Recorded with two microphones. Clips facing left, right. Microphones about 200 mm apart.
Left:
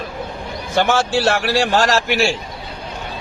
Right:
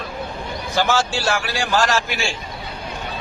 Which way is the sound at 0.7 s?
60° left (ahead or behind).